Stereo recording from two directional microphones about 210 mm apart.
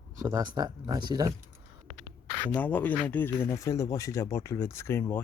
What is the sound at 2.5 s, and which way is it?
Speech, 10° left (ahead or behind).